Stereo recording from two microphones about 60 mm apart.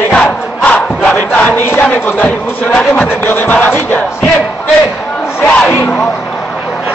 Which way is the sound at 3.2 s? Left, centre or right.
Left.